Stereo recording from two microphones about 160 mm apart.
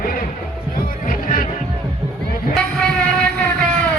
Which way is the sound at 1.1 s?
55° left (ahead or behind).